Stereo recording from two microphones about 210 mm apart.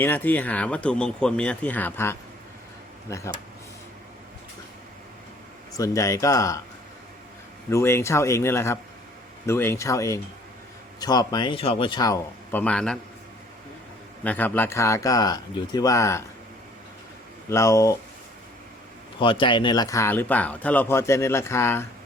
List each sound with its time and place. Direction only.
0.0 s speech: 10° left (ahead or behind)
5.7 s speech: 15° left (ahead or behind)
7.7 s speech: 10° left (ahead or behind)
14.3 s speech: 10° left (ahead or behind)
17.5 s speech: 15° left (ahead or behind)
19.2 s speech: 25° left (ahead or behind)